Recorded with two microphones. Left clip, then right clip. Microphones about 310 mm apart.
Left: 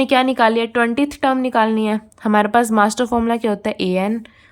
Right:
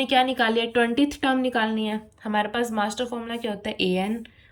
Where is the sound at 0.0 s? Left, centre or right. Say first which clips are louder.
Left 6 dB; centre.